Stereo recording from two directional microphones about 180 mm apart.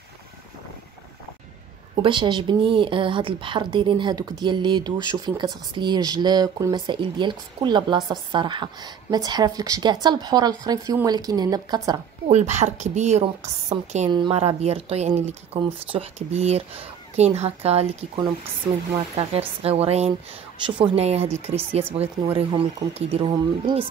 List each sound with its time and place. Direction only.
2.0 s speech: 25° right (ahead or behind)
12.3 s speech: 40° right (ahead or behind)